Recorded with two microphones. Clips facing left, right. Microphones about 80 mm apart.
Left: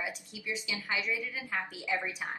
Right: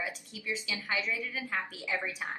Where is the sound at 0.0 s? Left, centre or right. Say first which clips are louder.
Even; centre.